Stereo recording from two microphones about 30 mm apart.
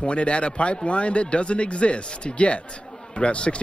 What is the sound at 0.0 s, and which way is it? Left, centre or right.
Speech, left.